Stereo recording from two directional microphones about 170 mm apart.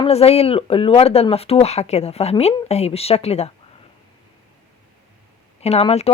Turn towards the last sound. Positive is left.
turn(degrees=35)  # may be behind; listen again after turning